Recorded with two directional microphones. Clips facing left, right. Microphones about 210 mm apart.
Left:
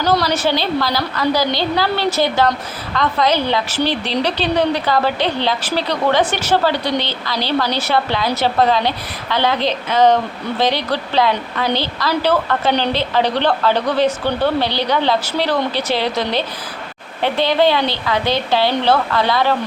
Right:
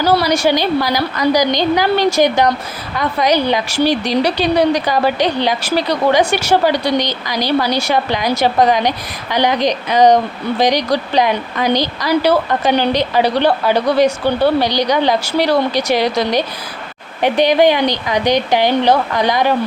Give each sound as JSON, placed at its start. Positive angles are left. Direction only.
{"t": 0.0, "sound": "a woman's voice", "side_deg": -10}